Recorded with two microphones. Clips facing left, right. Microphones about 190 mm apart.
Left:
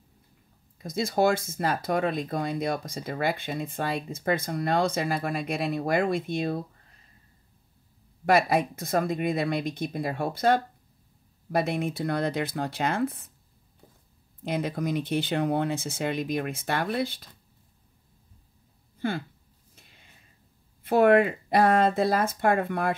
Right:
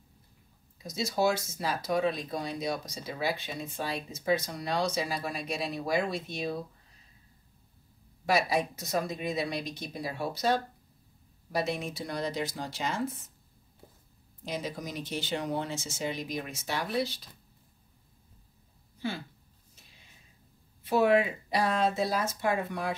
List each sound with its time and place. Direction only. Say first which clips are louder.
0.8 s speech: left 4 dB; 55° left (ahead or behind)
8.3 s speech: left 5 dB; 55° left (ahead or behind)
14.4 s speech: left 7 dB; 55° left (ahead or behind)
18.9 s speech: left 5 dB; 55° left (ahead or behind)
20.8 s speech: left 5 dB; 55° left (ahead or behind)